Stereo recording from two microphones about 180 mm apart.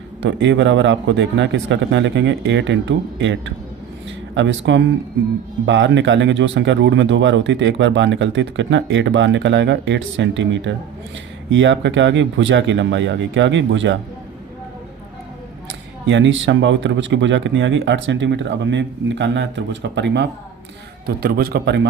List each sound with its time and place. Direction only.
0.2 s speech: 90° right
16.0 s speech: 90° right
21.2 s a man's voice: 55° right (ahead or behind)